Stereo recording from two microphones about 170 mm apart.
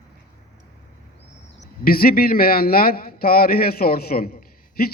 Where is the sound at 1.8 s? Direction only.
60° left (ahead or behind).